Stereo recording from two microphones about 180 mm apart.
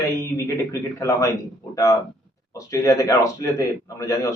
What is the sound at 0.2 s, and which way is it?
A man's voice, 15° left (ahead or behind).